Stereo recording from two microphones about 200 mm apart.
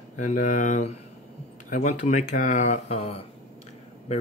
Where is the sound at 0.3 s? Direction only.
40° left (ahead or behind).